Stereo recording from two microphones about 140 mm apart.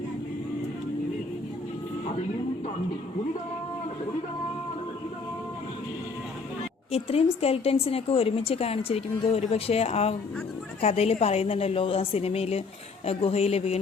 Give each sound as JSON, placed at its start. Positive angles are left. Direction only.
{"t": 6.9, "sound": "a woman's voice", "side_deg": 45}